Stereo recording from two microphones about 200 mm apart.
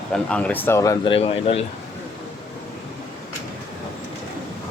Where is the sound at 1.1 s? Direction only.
30° left (ahead or behind).